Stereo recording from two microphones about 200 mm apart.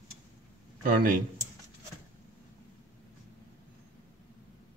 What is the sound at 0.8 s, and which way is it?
Speech, 45° right (ahead or behind).